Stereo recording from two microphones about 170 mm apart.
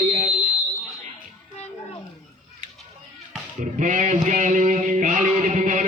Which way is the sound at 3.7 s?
45° right (ahead or behind).